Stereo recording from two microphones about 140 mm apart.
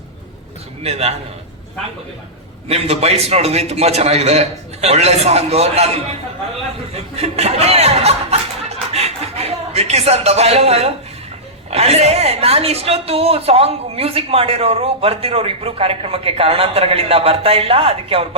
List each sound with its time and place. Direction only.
0.8 s a woman's voice: 45° right (ahead or behind)
2.6 s a woman's voice: 45° right (ahead or behind)
6.9 s chuckle: 50° right (ahead or behind)
11.7 s a woman's voice: 50° right (ahead or behind)